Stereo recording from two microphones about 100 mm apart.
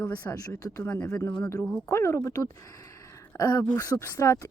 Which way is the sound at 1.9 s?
25° left (ahead or behind).